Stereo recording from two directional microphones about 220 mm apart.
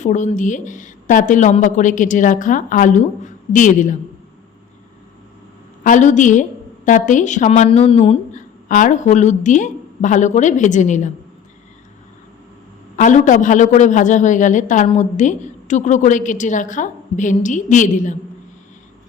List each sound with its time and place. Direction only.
0.0 s a man's voice: 35° left (ahead or behind)
5.8 s a man's voice: 35° left (ahead or behind)
13.0 s a man's voice: 35° left (ahead or behind)